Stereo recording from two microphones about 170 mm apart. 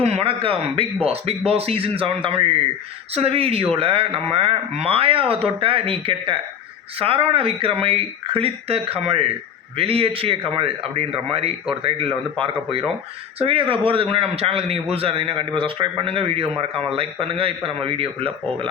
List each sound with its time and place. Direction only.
0.0 s a man's voice: 35° right (ahead or behind)
18.2 s speech: 5° left (ahead or behind)